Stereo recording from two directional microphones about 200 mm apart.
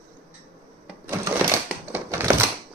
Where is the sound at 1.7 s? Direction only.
10° right (ahead or behind).